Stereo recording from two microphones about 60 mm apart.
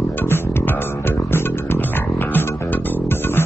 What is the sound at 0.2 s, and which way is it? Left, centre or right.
Music, left.